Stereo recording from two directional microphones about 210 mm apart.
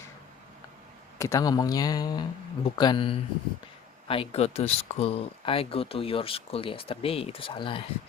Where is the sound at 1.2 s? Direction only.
15° left (ahead or behind).